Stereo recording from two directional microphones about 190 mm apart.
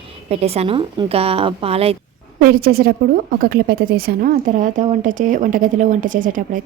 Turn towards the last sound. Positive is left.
turn(degrees=-45)  # may be behind; listen again after turning